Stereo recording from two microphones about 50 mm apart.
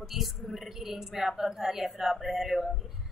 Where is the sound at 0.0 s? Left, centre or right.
Centre.